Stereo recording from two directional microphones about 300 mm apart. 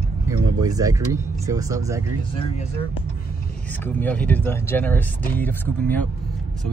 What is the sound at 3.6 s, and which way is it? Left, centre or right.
Speech, centre.